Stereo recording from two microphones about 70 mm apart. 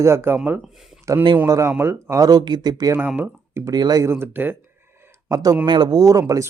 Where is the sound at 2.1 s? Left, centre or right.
Right.